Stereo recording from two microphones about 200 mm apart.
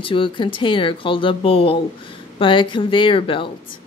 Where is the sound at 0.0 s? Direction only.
25° left (ahead or behind).